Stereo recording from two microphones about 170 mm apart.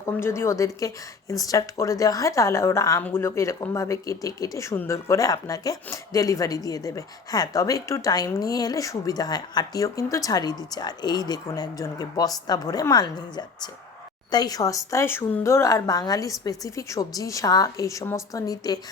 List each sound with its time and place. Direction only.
0.0 s a woman's voice: 15° left (ahead or behind)